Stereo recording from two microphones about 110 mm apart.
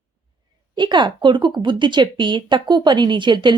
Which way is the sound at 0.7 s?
45° right (ahead or behind).